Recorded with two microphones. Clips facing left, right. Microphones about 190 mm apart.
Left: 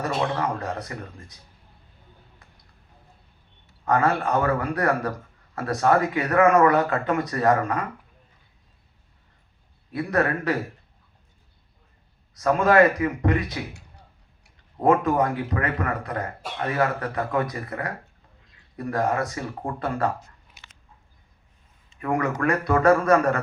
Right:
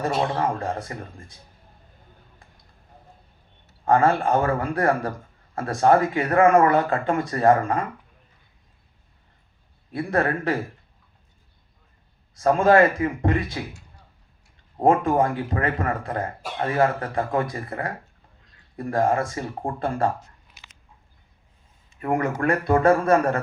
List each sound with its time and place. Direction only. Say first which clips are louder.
0.0 s speech: right 2 dB; 30° right (ahead or behind)
3.8 s speech: right 3 dB; 30° right (ahead or behind)
9.9 s speech: even; 30° right (ahead or behind)
12.3 s speech: right 2 dB; 30° right (ahead or behind)
14.8 s speech: right 1 dB; 30° right (ahead or behind)
22.0 s a man's voice: right 1 dB; 30° right (ahead or behind)